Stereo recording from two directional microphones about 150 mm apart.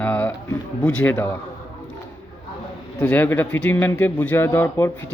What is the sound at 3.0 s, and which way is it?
A man's voice, 10° left (ahead or behind).